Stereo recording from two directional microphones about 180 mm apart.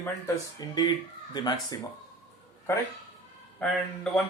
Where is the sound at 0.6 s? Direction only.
20° left (ahead or behind).